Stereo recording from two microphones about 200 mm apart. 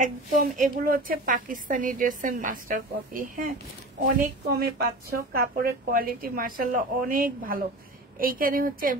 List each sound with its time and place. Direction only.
0.0 s a woman's voice: 40° right (ahead or behind)